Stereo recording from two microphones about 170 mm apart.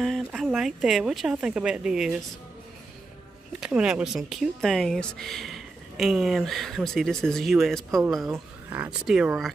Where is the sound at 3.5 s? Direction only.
5° right (ahead or behind).